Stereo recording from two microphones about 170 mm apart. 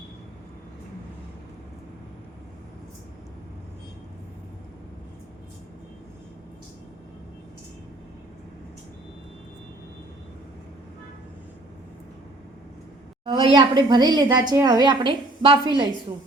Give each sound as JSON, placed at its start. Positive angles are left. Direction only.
{"t": 13.2, "sound": "a woman's voice", "side_deg": -30}